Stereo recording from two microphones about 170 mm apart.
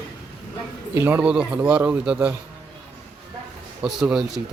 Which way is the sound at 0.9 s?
15° right (ahead or behind).